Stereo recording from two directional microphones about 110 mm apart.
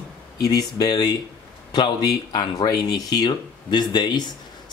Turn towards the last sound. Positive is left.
turn(degrees=40)  # may be behind; listen again after turning